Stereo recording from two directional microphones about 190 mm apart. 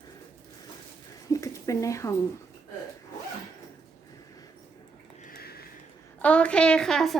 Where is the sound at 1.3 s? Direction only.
15° left (ahead or behind).